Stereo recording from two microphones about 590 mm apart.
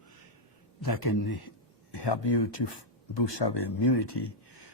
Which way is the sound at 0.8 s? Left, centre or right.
Left.